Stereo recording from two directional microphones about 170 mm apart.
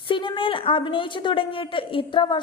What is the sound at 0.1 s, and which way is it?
A woman's voice, 25° left (ahead or behind).